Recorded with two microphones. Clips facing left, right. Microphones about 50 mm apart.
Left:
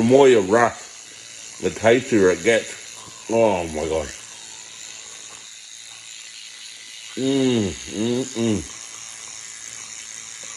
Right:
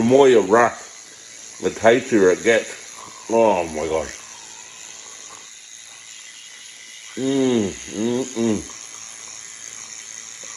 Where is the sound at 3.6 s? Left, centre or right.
Right.